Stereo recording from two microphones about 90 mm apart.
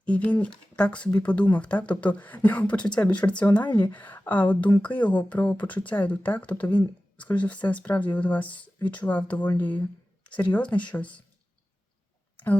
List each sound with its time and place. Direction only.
0.0 s speech: 15° left (ahead or behind)